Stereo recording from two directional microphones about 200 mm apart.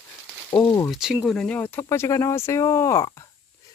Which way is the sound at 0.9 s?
5° right (ahead or behind).